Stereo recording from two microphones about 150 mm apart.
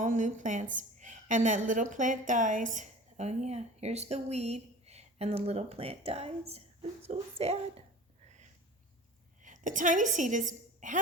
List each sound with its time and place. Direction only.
0.0 s a woman's voice: 55° right (ahead or behind)
9.4 s a woman's voice: 60° right (ahead or behind)